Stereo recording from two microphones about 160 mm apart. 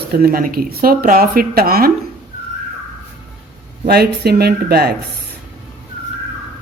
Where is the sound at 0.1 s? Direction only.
70° right (ahead or behind).